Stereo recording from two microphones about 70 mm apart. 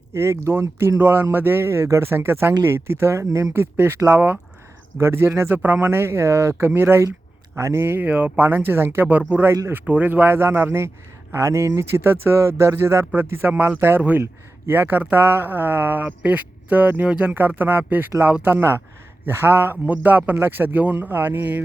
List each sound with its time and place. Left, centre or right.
0.1 s a man's voice: right
8.0 s a man's voice: right
9.0 s a man's voice: right